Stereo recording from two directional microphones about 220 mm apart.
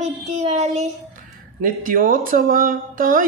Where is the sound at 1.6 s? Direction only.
40° right (ahead or behind).